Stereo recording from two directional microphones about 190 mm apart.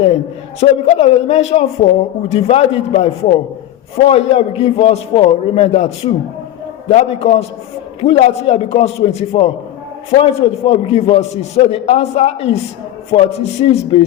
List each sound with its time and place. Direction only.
0.6 s a man's voice: 35° left (ahead or behind)